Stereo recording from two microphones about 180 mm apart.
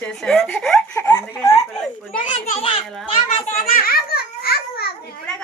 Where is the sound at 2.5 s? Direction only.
35° left (ahead or behind).